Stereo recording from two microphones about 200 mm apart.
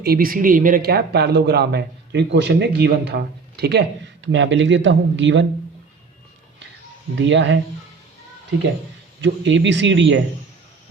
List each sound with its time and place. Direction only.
0.0 s speech: 50° right (ahead or behind); by 5.5 s 65° right (ahead or behind)
7.2 s speech: 65° right (ahead or behind)
9.2 s speech: 65° right (ahead or behind)